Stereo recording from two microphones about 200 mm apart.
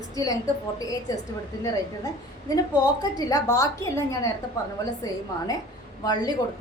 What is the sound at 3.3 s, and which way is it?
A woman's voice, 15° left (ahead or behind).